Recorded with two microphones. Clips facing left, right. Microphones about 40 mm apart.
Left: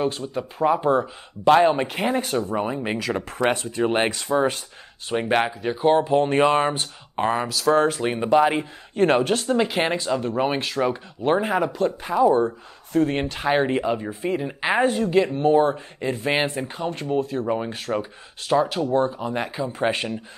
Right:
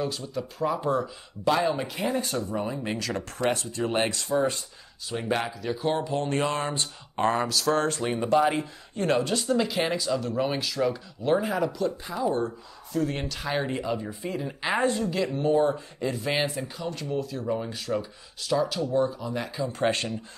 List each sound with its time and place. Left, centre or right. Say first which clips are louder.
0.0 s speech: left 5 dB; left
3.0 s speech: left 6 dB; centre
3.5 s speech: left 5 dB; left
4.1 s speech: left 4 dB; left
5.1 s speech: left 7 dB; left
7.2 s speech: left 2 dB; centre
8.0 s speech: left 4 dB; left
19.7 s speech: left 1 dB; centre